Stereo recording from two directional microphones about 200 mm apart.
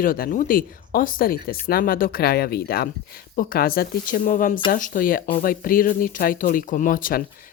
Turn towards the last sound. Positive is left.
turn(degrees=45)  # may be behind; listen again after turning